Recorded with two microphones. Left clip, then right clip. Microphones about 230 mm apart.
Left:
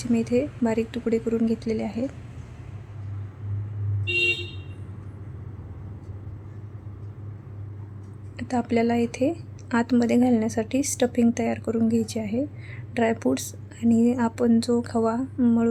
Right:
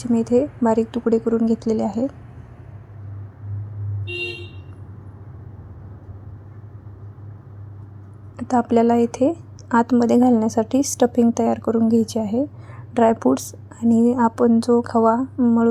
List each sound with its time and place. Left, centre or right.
0.0 s a woman's voice: centre
8.4 s a woman's voice: centre